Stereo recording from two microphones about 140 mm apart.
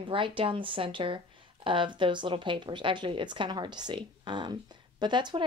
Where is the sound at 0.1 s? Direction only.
40° right (ahead or behind).